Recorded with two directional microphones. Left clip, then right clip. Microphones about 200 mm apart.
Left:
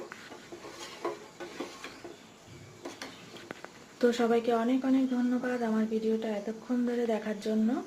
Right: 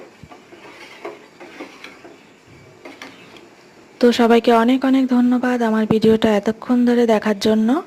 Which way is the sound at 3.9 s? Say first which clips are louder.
Right 13 dB; 40° right (ahead or behind).